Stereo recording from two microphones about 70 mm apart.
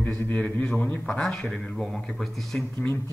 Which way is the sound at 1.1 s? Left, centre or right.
Centre.